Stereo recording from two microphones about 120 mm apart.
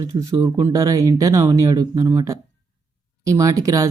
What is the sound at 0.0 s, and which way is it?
Speech, 30° right (ahead or behind).